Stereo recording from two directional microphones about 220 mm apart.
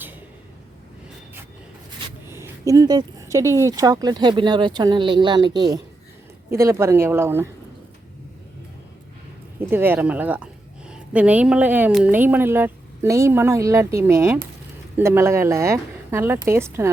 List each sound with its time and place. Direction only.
2.2 s a sound: 10° right (ahead or behind)
3.3 s a woman's voice: 15° right (ahead or behind)
9.6 s a woman's voice: 10° right (ahead or behind)